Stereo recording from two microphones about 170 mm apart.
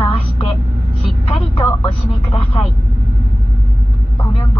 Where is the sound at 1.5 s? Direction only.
15° left (ahead or behind).